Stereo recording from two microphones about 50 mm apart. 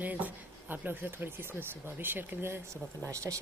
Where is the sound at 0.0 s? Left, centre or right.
Right.